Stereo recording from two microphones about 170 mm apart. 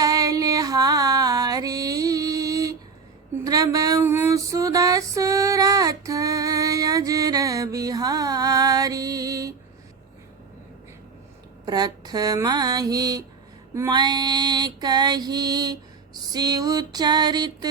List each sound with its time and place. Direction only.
0.0 s female singing: 20° right (ahead or behind)
11.6 s female singing: 25° right (ahead or behind)